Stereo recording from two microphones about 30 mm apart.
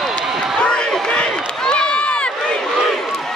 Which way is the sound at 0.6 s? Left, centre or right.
Left.